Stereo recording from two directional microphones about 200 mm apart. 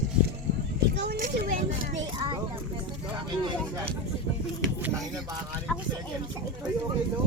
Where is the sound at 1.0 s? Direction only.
50° right (ahead or behind).